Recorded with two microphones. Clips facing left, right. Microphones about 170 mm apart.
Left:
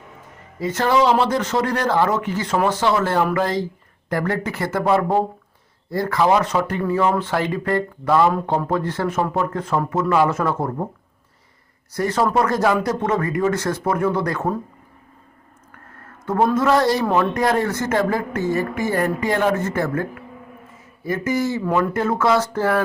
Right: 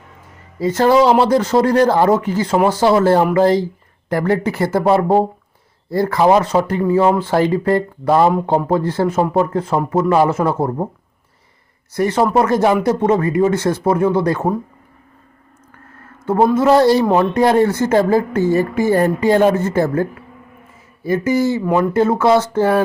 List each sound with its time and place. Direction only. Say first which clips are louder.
0.6 s a woman's voice: right 5 dB; 35° right (ahead or behind)
11.9 s a woman's voice: right 4 dB; 25° right (ahead or behind)
16.6 s a woman's voice: right 8 dB; 30° right (ahead or behind)
21.6 s speech: right 4 dB; 15° right (ahead or behind)
21.9 s a woman's voice: right 5 dB; 30° right (ahead or behind)